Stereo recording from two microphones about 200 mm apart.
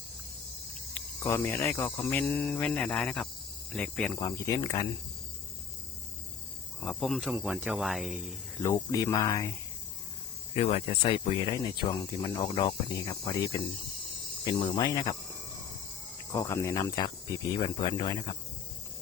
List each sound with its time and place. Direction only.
0.9 s speech: 10° left (ahead or behind)
6.8 s speech: centre (ahead or behind)
8.6 s speech: 15° left (ahead or behind)
10.5 s speech: 30° left (ahead or behind)
16.3 s speech: 15° left (ahead or behind)